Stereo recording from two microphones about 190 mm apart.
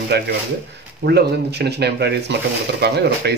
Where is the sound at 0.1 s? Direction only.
60° right (ahead or behind).